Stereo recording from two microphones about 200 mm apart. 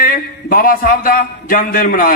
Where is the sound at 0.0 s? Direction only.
45° left (ahead or behind).